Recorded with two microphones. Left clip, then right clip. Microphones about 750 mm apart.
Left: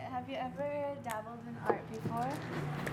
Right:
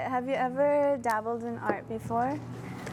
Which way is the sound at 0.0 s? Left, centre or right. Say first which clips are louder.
Right 11 dB; right.